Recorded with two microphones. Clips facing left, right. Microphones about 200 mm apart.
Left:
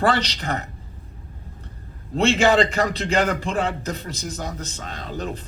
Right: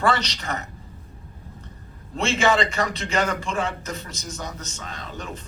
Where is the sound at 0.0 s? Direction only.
35° left (ahead or behind).